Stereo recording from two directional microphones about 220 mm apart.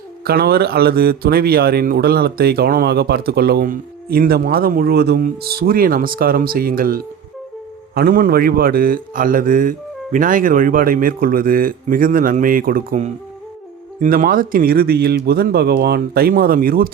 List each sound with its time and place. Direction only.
0.3 s a man's voice: 45° right (ahead or behind)